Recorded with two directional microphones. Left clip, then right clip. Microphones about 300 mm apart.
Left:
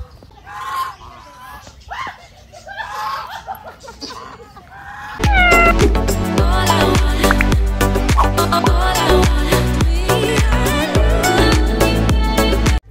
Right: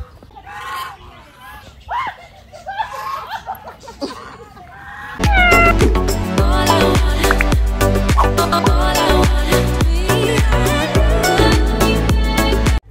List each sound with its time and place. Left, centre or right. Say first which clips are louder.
0.5 s goose: left 3 dB; centre
3.0 s snicker: left 2 dB; centre
3.5 s music: right 1 dB; centre
5.2 s cat: even; centre